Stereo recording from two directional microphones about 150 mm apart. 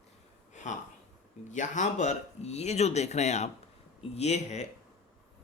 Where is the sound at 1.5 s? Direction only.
55° left (ahead or behind).